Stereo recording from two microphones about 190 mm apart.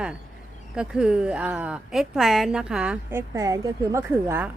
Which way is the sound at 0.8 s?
5° right (ahead or behind).